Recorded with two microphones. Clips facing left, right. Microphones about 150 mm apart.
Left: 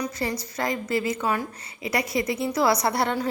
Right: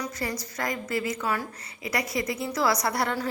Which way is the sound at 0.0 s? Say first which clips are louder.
Left 3 dB; 25° left (ahead or behind).